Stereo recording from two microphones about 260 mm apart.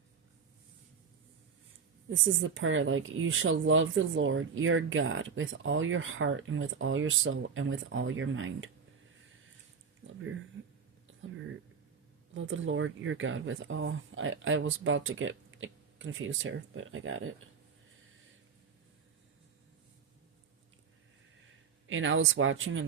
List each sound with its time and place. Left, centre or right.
2.0 s speech: right
12.3 s speech: right
21.8 s speech: right